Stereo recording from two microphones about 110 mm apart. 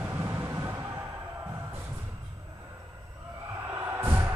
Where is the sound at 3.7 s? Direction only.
20° right (ahead or behind).